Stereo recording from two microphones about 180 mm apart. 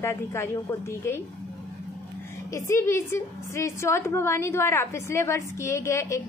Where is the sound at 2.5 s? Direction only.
15° left (ahead or behind).